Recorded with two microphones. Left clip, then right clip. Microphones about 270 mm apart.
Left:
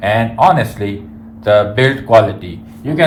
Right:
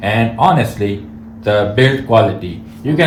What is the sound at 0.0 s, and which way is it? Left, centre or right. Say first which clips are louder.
Speech: left 2 dB; centre.